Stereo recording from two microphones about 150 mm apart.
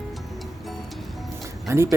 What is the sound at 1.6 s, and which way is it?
Speech, 20° right (ahead or behind).